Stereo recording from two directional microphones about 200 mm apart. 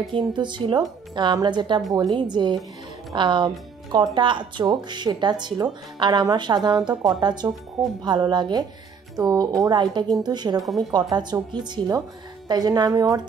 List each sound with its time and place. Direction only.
0.1 s speech: 25° right (ahead or behind)
10.6 s speech: centre (ahead or behind)
10.9 s speech: 20° right (ahead or behind)